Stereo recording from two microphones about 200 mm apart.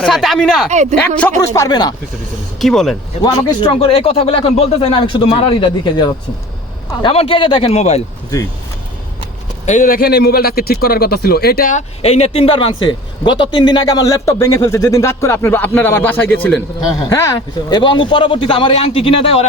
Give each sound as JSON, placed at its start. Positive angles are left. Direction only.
{"t": 0.0, "sound": "speech", "side_deg": 0}
{"t": 0.7, "sound": "speech", "side_deg": -35}
{"t": 1.5, "sound": "speech", "side_deg": 20}
{"t": 2.6, "sound": "speech", "side_deg": 0}
{"t": 3.2, "sound": "speech", "side_deg": 25}
{"t": 9.6, "sound": "a man's voice", "side_deg": 40}
{"t": 12.0, "sound": "speech", "side_deg": 30}